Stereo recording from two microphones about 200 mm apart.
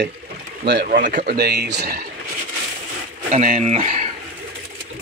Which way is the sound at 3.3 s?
35° right (ahead or behind).